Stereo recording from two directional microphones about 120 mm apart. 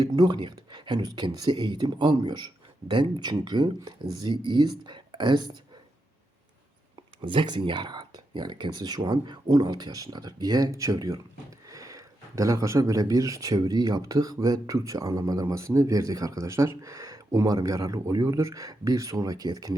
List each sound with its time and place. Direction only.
0.0 s speech: 35° right (ahead or behind)
7.2 s speech: 45° right (ahead or behind)